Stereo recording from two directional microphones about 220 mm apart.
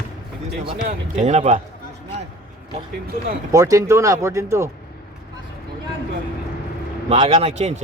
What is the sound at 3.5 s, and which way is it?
Speech, 15° right (ahead or behind).